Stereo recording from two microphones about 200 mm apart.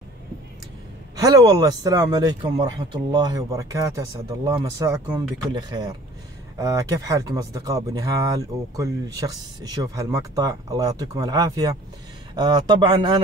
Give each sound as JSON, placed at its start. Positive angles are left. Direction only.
{"t": 1.2, "sound": "speech", "side_deg": -20}